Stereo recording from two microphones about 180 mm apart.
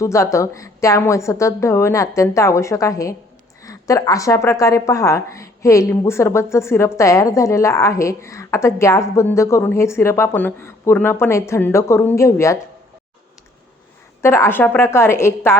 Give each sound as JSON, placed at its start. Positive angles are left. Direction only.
{"t": 0.0, "sound": "speech", "side_deg": 15}
{"t": 14.2, "sound": "speech", "side_deg": 15}